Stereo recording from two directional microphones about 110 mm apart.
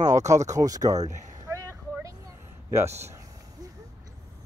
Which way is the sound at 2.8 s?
25° right (ahead or behind).